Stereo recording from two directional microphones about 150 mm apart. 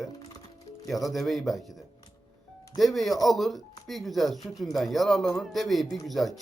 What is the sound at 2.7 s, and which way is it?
A man's voice, centre (ahead or behind).